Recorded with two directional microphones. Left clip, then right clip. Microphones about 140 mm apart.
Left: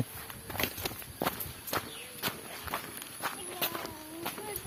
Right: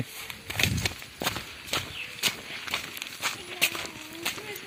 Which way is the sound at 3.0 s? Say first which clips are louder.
Right 6 dB; 5° right (ahead or behind).